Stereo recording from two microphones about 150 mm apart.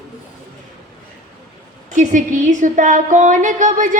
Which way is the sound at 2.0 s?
55° right (ahead or behind).